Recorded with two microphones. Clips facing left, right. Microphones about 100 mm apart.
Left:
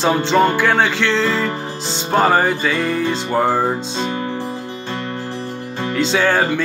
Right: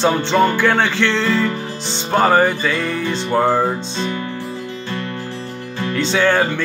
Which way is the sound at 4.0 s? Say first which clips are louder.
Left 2 dB; 30° left (ahead or behind).